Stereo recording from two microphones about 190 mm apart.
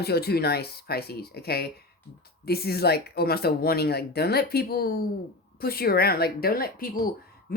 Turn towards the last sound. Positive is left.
turn(degrees=50)  # may be behind; listen again after turning